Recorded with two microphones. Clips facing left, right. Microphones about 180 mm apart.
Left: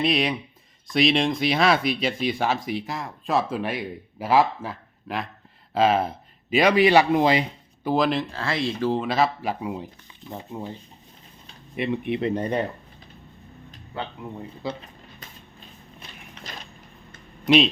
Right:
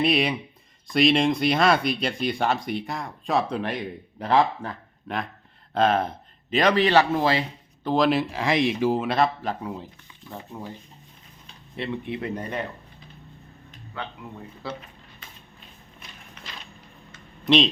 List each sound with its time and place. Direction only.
0.0 s speech: centre (ahead or behind); by 7.4 s 15° left (ahead or behind)
7.9 s speech: centre (ahead or behind)
8.2 s speech: 15° right (ahead or behind); by 10.8 s 20° left (ahead or behind)
11.8 s speech: 20° left (ahead or behind)
14.2 s speech: 30° left (ahead or behind)
14.6 s speech: 15° left (ahead or behind)
17.4 s speech: 5° left (ahead or behind)